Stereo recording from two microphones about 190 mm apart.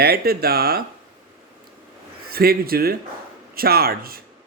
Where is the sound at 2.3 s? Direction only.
50° right (ahead or behind).